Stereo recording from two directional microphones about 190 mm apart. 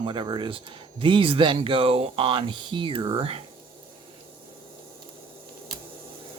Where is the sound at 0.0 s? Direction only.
25° right (ahead or behind).